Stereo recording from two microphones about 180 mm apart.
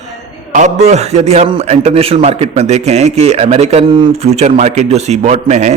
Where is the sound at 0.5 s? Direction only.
40° right (ahead or behind).